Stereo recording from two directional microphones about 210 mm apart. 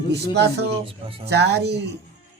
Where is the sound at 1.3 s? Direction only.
50° right (ahead or behind).